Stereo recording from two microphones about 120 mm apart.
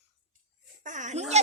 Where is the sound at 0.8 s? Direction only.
90° right; by 1.4 s 70° right (ahead or behind).